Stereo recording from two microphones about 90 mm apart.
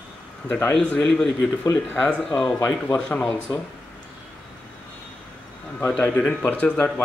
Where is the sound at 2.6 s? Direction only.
15° left (ahead or behind).